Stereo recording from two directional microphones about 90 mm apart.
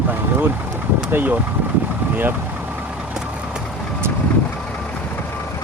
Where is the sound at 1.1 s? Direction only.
20° right (ahead or behind).